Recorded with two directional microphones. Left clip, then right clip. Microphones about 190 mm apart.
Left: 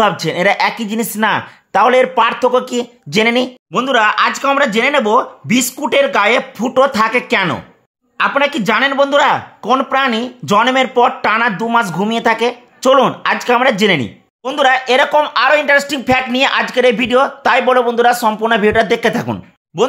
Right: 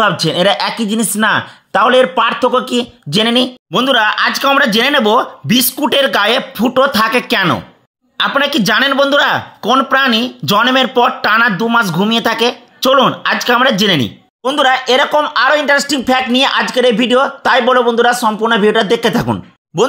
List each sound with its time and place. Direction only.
0.0 s speech: 5° right (ahead or behind)
19.7 s speech: 20° right (ahead or behind)